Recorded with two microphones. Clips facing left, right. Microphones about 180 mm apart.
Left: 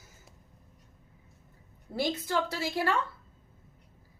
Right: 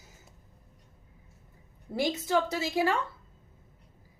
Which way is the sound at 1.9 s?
15° right (ahead or behind).